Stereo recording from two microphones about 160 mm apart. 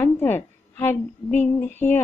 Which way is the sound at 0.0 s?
15° left (ahead or behind).